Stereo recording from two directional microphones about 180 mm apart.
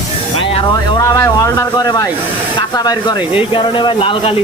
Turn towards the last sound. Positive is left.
turn(degrees=30)  # may be behind; listen again after turning